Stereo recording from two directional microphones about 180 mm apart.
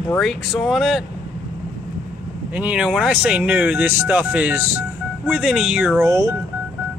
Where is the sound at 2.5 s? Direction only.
5° right (ahead or behind).